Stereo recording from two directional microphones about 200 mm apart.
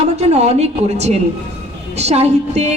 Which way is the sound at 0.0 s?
30° right (ahead or behind).